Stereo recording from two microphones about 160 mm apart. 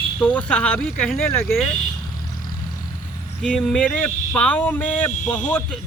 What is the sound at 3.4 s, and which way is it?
Speech, 5° left (ahead or behind).